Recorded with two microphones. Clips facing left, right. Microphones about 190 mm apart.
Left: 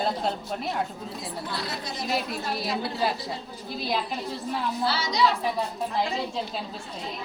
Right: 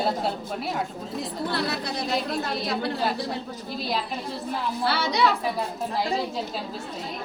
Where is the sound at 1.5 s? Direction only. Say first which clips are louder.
Right 7 dB; 65° right (ahead or behind).